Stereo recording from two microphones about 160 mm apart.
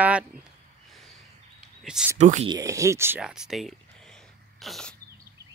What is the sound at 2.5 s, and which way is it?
Speech, 20° right (ahead or behind).